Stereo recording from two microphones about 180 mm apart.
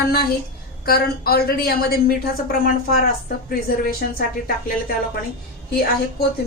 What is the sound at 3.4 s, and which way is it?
Speech, 55° left (ahead or behind).